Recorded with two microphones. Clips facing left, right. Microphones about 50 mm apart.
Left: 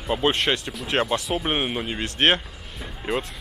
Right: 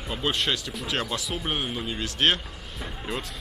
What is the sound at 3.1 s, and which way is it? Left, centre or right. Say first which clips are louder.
Speech: left 7 dB; centre.